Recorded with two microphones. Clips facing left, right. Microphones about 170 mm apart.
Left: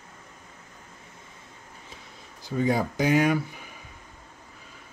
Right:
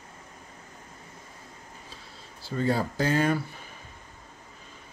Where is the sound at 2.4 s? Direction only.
15° left (ahead or behind).